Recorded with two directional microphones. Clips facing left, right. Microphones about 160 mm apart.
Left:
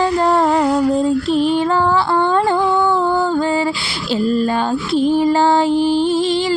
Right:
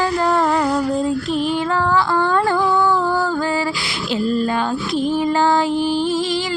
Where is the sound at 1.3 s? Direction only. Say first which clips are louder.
Left 4 dB; 30° left (ahead or behind).